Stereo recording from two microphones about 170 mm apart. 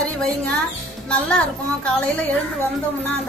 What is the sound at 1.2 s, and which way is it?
Speech, 5° left (ahead or behind).